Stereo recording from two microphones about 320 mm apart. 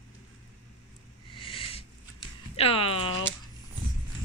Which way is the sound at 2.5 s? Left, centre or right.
Centre.